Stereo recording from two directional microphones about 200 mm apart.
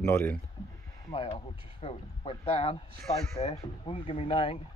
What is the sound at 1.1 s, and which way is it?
Speech, 30° left (ahead or behind).